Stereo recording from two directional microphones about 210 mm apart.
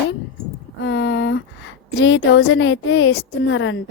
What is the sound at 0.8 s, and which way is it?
A woman's voice, 60° left (ahead or behind).